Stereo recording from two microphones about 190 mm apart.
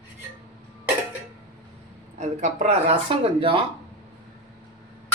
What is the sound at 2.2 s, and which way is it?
Speech, 40° right (ahead or behind).